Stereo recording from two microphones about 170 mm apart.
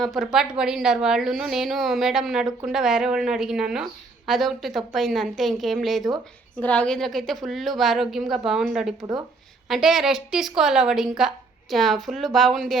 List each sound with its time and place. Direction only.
0.0 s a woman's voice: centre (ahead or behind)
9.0 s speech: 25° right (ahead or behind)
9.6 s a woman's voice: centre (ahead or behind)